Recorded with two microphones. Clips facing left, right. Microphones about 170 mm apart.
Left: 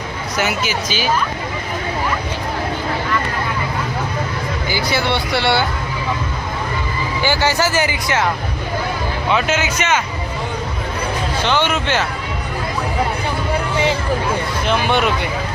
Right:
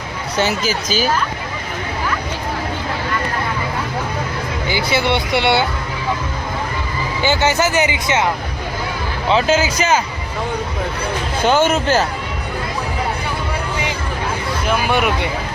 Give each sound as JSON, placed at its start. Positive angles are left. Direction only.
{"t": 0.3, "sound": "speech", "side_deg": -35}
{"t": 4.7, "sound": "speech", "side_deg": -20}
{"t": 7.2, "sound": "speech", "side_deg": -20}
{"t": 9.3, "sound": "speech", "side_deg": -35}
{"t": 11.4, "sound": "speech", "side_deg": -45}
{"t": 14.7, "sound": "speech", "side_deg": -10}